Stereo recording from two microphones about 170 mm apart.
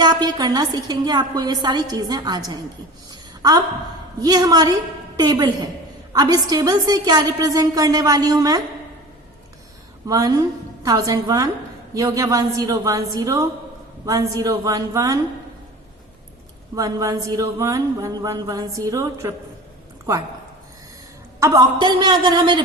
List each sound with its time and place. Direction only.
0.0 s speech: 25° right (ahead or behind)
3.1 s a sound: 25° right (ahead or behind)
4.2 s speech: 25° right (ahead or behind)
10.1 s speech: 20° right (ahead or behind)
16.7 s speech: 20° right (ahead or behind)
21.4 s speech: 25° right (ahead or behind)